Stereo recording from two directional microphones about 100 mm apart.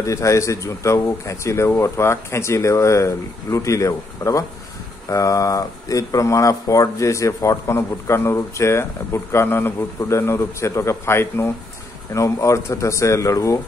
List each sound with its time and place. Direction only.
0.0 s speech: 30° left (ahead or behind)